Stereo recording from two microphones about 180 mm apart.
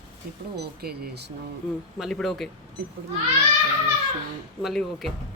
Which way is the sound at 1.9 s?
Centre (ahead or behind).